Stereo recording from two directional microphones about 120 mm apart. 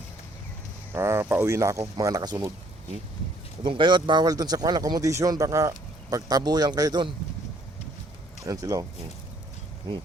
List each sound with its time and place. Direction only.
0.9 s speech: 20° right (ahead or behind)
3.6 s speech: 40° right (ahead or behind)
8.4 s speech: 30° right (ahead or behind)